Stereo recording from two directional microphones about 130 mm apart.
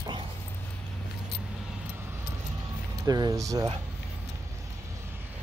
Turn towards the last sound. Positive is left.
turn(degrees=-25)  # may be behind; listen again after turning